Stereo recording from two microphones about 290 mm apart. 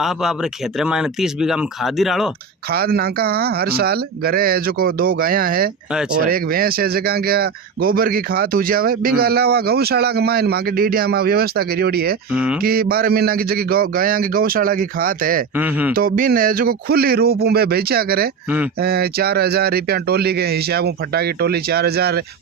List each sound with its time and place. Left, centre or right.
0.0 s speech: centre
2.7 s speech: right
12.3 s speech: centre
12.6 s a man's voice: right
15.5 s speech: centre
16.0 s speech: right